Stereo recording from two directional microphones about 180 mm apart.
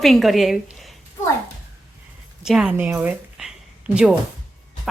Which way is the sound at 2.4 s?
5° right (ahead or behind).